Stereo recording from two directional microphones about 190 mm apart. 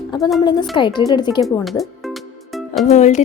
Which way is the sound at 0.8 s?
25° left (ahead or behind).